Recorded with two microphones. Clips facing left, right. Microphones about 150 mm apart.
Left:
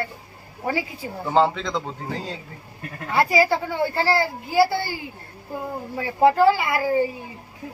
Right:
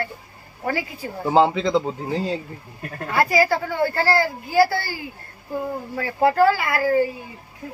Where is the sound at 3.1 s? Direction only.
25° left (ahead or behind).